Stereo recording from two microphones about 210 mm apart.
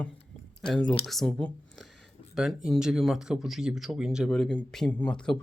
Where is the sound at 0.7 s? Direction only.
5° left (ahead or behind).